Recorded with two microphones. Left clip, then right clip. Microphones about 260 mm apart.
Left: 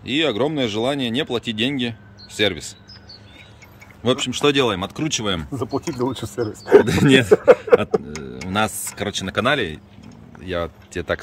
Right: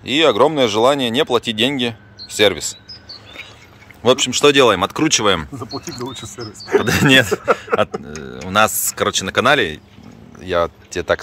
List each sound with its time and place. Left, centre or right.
0.0 s speech: centre
4.0 s speech: centre
5.5 s speech: left
6.9 s speech: centre